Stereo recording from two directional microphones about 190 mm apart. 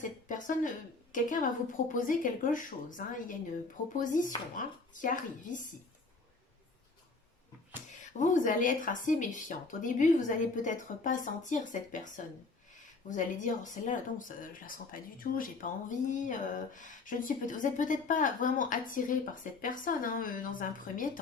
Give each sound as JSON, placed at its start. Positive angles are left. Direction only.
{"t": 0.0, "sound": "a sound", "side_deg": 45}
{"t": 1.1, "sound": "speech", "side_deg": 45}
{"t": 8.2, "sound": "speech", "side_deg": 40}